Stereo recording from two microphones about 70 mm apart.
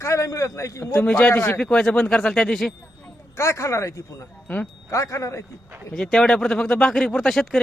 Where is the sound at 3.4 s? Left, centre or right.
Left.